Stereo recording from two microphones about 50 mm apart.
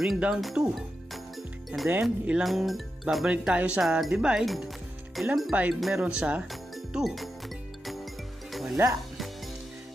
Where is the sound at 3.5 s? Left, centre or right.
Right.